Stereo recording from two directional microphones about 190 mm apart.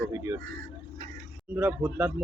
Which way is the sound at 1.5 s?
10° right (ahead or behind).